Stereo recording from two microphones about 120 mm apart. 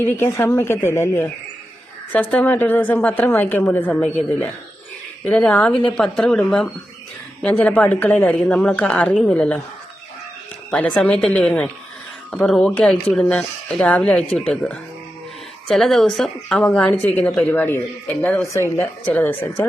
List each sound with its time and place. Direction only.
0.2 s a woman's voice: 20° left (ahead or behind)
5.2 s a woman's voice: 10° left (ahead or behind)
10.7 s a woman's voice: 10° left (ahead or behind)